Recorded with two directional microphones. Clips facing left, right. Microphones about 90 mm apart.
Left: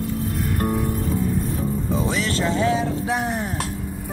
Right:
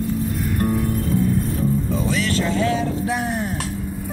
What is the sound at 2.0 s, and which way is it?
Music, 25° left (ahead or behind).